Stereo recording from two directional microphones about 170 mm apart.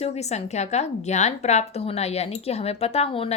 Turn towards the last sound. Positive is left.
turn(degrees=35)  # may be behind; listen again after turning